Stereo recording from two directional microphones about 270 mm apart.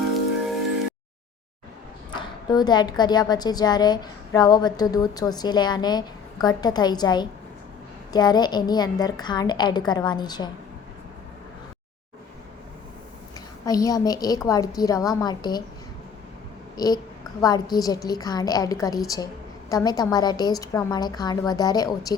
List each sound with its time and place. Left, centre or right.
2.1 s a woman's voice: centre
13.7 s a woman's voice: centre
16.7 s a woman's voice: centre